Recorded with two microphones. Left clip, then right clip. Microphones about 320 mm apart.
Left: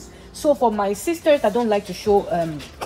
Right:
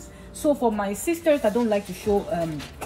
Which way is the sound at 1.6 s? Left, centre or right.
Centre.